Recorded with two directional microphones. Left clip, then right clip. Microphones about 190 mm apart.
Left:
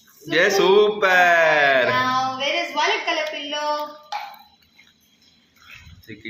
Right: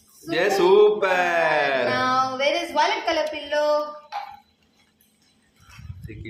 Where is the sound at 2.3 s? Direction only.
20° right (ahead or behind).